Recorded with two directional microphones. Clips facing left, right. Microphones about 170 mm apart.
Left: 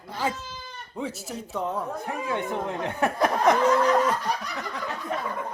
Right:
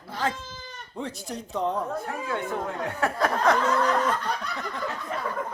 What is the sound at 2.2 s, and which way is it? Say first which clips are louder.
Speech: left 3 dB; 20° left (ahead or behind).